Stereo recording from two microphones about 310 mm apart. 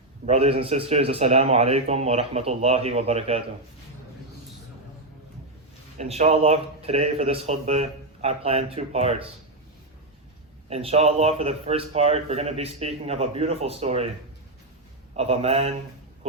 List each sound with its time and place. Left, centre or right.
0.3 s a man's voice: centre
6.0 s a man's voice: right
10.7 s a man's voice: centre
15.1 s a man's voice: centre